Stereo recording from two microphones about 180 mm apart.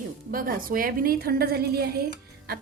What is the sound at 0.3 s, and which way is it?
A woman's voice, 50° right (ahead or behind).